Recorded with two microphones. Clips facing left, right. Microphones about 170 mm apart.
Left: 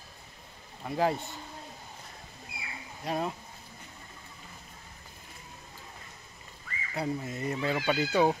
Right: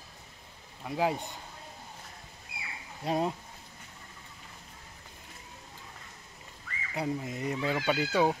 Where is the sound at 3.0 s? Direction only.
25° right (ahead or behind).